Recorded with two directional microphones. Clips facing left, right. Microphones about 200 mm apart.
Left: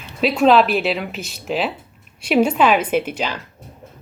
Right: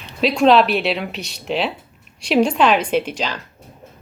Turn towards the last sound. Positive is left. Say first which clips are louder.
# even
turn(degrees=10)  # may be behind; listen again after turning